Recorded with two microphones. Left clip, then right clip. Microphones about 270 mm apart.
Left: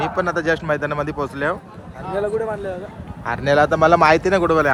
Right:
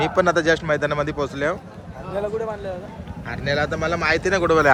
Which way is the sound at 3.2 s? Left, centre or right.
Centre.